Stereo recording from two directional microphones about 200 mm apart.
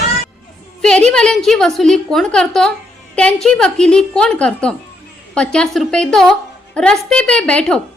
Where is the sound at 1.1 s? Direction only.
5° left (ahead or behind).